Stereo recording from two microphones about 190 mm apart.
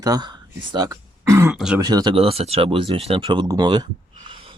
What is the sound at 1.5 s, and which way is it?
Speech, 5° right (ahead or behind).